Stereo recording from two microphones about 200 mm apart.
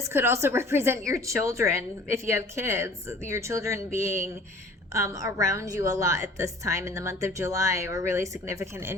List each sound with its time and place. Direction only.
0.0 s a woman's voice: 10° right (ahead or behind)